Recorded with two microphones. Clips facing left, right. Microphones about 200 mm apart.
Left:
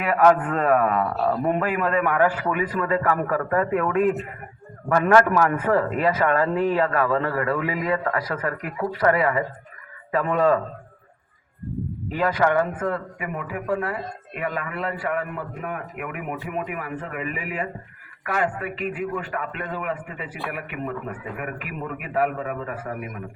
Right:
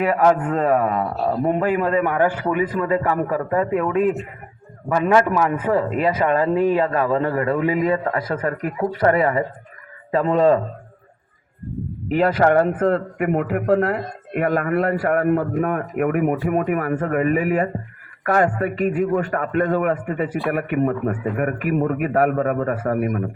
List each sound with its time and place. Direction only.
0.0 s speech: 35° right (ahead or behind)
4.9 s a man's voice: 10° right (ahead or behind)
12.4 s speech: 40° right (ahead or behind)
12.7 s a man's voice: 60° right (ahead or behind)